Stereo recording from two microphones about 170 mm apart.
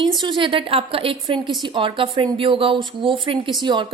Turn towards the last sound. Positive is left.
turn(degrees=-25)  # may be behind; listen again after turning